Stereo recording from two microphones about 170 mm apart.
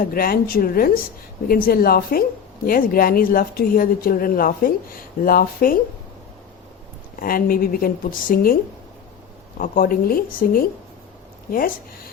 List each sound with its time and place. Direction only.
0.0 s speech: 60° left (ahead or behind)
7.2 s speech: 55° left (ahead or behind)
9.6 s speech: 55° left (ahead or behind)